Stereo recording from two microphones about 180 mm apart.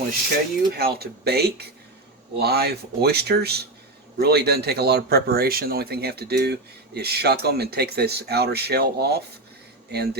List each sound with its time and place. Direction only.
0.7 s speech: 60° right (ahead or behind)